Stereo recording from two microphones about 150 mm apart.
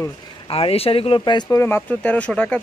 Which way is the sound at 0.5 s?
40° left (ahead or behind).